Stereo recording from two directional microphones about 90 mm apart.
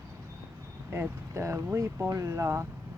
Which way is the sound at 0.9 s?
30° right (ahead or behind).